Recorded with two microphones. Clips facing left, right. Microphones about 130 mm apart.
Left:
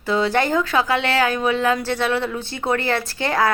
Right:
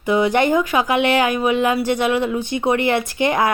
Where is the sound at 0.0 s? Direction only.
15° right (ahead or behind).